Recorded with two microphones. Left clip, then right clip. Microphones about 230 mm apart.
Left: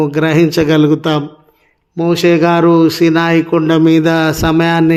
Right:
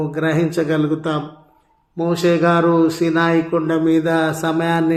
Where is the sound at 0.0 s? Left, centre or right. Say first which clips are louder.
Left 7 dB; left.